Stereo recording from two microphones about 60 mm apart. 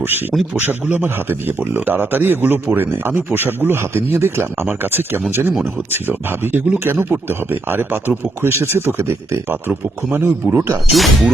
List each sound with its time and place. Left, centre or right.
0.0 s a man's voice: right
4.6 s a man's voice: right
9.5 s a man's voice: right
10.9 s speech: centre